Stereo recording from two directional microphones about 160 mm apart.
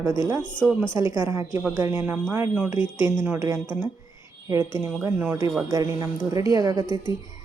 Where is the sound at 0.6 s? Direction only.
5° left (ahead or behind).